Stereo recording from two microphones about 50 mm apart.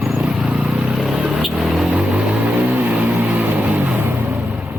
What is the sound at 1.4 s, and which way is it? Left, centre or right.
Vehicle, centre.